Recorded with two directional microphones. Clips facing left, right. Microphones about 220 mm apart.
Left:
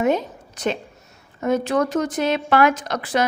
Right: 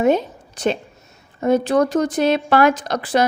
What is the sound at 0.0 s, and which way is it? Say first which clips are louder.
A woman's voice: right 3 dB; 30° right (ahead or behind).